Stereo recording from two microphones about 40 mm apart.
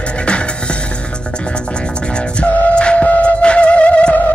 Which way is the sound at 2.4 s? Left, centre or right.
Left.